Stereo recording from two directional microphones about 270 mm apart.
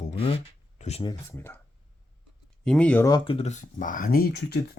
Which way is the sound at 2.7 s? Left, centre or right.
Centre.